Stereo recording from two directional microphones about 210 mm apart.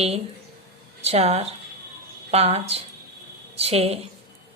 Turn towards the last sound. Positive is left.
turn(degrees=-30)  # may be behind; listen again after turning